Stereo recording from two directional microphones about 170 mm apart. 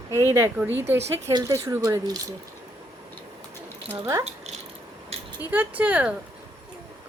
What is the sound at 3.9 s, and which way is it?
Speech, 15° right (ahead or behind).